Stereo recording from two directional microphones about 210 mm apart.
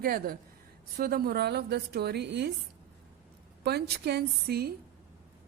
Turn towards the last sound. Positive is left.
turn(degrees=-50)  # may be behind; listen again after turning